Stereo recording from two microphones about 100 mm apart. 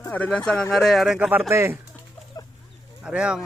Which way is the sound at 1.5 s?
25° right (ahead or behind).